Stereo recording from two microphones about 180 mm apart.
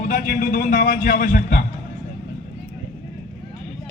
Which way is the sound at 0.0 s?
55° left (ahead or behind).